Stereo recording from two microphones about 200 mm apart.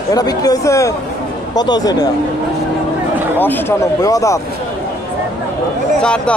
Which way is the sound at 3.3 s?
10° left (ahead or behind).